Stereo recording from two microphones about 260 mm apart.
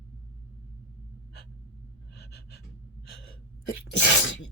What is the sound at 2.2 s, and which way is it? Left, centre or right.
Gasp, left.